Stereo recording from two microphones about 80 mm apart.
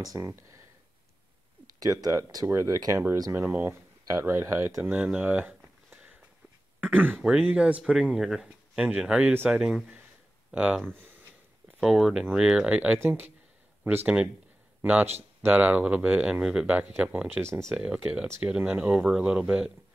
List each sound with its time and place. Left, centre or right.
0.0 s speech: right
1.8 s speech: right
3.3 s speech: right
4.9 s speech: centre
5.2 s a sound: centre
6.8 s speech: right
11.8 s speech: centre
13.0 s speech: right
17.7 s speech: centre